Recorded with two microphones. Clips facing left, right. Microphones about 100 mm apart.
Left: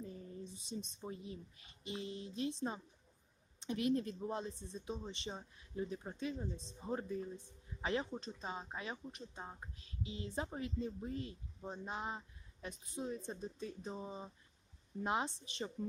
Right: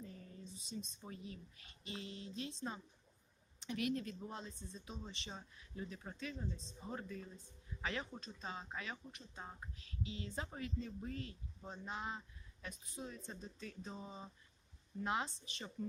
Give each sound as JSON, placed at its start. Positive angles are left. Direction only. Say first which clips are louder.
{"t": 0.7, "sound": "speech", "louder": "left 3 dB", "side_deg": 20}